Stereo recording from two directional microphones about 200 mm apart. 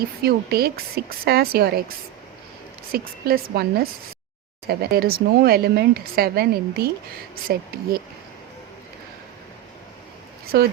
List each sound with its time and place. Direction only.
0.2 s speech: 50° right (ahead or behind)
2.9 s speech: 50° right (ahead or behind)
10.5 s speech: 50° right (ahead or behind)